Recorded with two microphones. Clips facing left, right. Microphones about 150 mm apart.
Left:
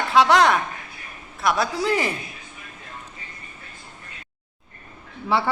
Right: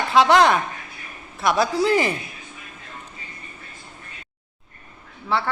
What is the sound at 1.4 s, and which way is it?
Speech, centre (ahead or behind).